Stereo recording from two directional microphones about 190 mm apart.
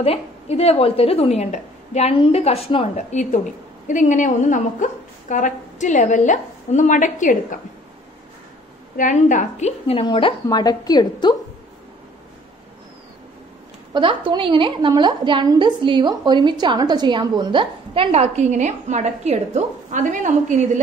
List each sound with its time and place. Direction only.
0.0 s a woman's voice: 30° left (ahead or behind)
8.9 s a woman's voice: 40° left (ahead or behind); by 11.3 s 20° left (ahead or behind)
13.9 s a woman's voice: 25° right (ahead or behind)